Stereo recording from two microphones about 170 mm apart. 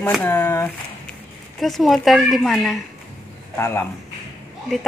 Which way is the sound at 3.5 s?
15° left (ahead or behind).